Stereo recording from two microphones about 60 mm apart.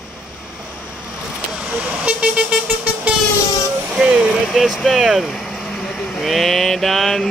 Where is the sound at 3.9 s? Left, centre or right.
Centre.